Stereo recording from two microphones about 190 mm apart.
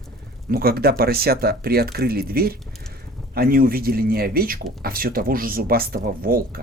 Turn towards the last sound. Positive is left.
turn(degrees=-50)  # may be behind; listen again after turning